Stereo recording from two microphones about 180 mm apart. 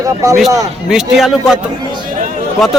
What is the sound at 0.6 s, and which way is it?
Speech, centre (ahead or behind).